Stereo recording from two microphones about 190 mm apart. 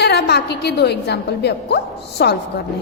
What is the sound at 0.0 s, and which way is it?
A woman's voice, 60° left (ahead or behind).